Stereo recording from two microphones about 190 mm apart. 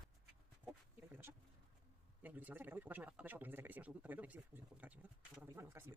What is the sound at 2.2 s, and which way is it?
Speech, 10° right (ahead or behind).